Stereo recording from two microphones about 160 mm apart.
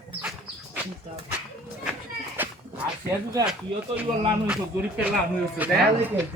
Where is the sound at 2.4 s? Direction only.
10° right (ahead or behind).